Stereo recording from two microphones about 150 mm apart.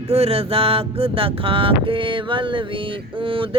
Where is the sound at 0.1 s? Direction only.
40° right (ahead or behind).